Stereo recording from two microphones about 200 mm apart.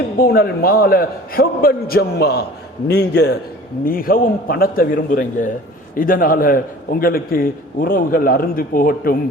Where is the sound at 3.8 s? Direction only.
45° left (ahead or behind).